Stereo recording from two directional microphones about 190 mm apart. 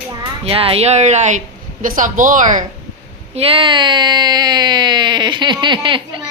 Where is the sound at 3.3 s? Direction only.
30° right (ahead or behind).